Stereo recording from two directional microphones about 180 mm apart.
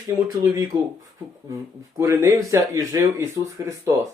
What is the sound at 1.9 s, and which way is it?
Speech, 15° right (ahead or behind).